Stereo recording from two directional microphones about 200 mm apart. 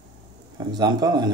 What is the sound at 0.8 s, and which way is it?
Speech, 20° right (ahead or behind).